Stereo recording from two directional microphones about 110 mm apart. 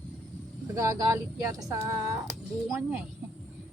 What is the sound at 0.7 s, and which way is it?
Speech, 25° right (ahead or behind).